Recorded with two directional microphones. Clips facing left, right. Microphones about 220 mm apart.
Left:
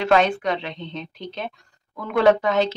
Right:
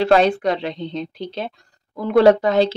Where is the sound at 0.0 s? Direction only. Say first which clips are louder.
Right 4 dB; 35° right (ahead or behind).